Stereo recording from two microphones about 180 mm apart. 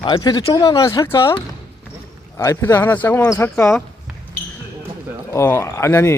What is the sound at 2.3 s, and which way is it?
Speech, 15° left (ahead or behind).